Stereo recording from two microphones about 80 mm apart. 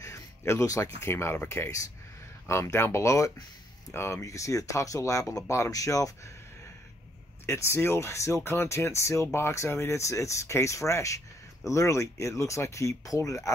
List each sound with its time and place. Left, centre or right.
0.0 s speech: left
7.4 s speech: left